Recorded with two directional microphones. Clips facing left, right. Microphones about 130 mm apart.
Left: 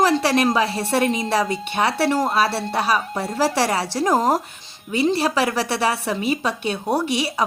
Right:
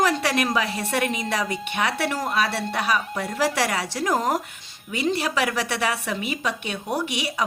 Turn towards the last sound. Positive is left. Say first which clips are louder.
# left 5 dB
turn(degrees=35)  # may be behind; listen again after turning